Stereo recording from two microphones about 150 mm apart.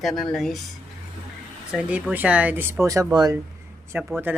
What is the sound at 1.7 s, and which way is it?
Speech, 10° right (ahead or behind).